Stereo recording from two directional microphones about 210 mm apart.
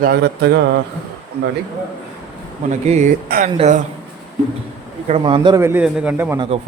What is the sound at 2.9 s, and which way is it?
Speech, 35° right (ahead or behind).